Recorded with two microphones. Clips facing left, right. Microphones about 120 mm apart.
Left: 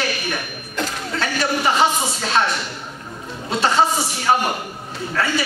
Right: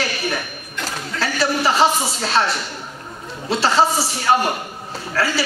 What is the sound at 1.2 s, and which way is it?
Speech, 30° right (ahead or behind).